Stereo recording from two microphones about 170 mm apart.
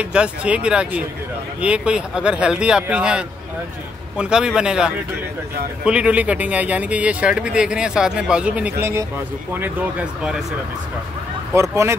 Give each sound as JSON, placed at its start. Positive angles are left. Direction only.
{"t": 0.0, "sound": "speech", "side_deg": -5}
{"t": 11.5, "sound": "speech", "side_deg": -15}